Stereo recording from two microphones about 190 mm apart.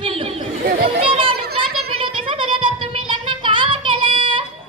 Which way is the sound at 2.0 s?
25° right (ahead or behind).